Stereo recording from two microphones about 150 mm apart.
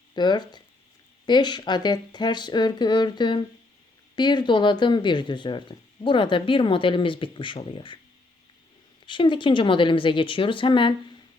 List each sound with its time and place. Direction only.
0.2 s speech: 30° left (ahead or behind)
9.0 s speech: 35° left (ahead or behind)